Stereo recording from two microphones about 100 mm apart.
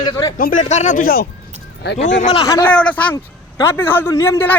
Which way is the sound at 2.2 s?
75° left (ahead or behind).